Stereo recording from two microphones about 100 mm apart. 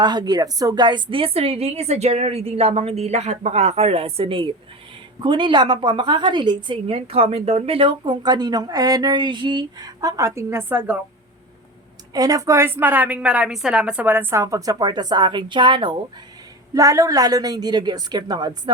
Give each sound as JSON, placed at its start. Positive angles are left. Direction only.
{"t": 0.0, "sound": "a woman's voice", "side_deg": -45}
{"t": 12.1, "sound": "a woman's voice", "side_deg": -40}
{"t": 14.4, "sound": "a woman's voice", "side_deg": -35}
{"t": 16.7, "sound": "a woman's voice", "side_deg": -35}